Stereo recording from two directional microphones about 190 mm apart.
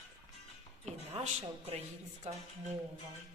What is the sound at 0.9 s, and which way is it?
Speech, 35° right (ahead or behind).